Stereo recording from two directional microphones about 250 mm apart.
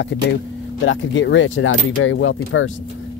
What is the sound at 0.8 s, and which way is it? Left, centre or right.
Speech, left.